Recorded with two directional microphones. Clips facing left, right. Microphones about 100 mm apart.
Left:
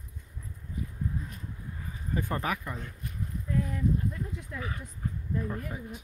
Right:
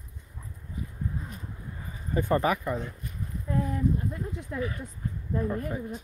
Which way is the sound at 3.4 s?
35° right (ahead or behind).